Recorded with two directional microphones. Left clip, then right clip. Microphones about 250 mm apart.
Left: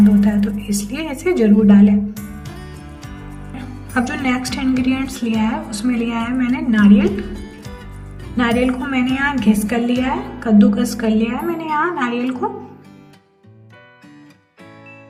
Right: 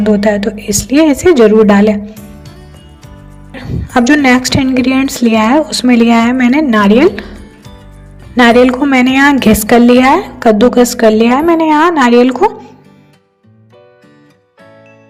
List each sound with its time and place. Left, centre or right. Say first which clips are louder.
0.0 s a woman's voice: right 7 dB; right
2.4 s music: left 1 dB; centre
3.9 s a woman's voice: right 12 dB; right
7.3 s music: even; centre
8.4 s a woman's voice: right 12 dB; right